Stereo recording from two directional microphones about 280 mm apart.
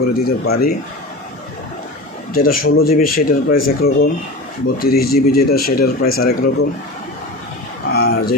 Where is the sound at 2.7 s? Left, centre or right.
Left.